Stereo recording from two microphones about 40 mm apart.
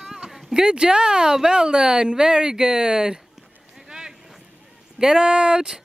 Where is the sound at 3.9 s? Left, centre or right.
Centre.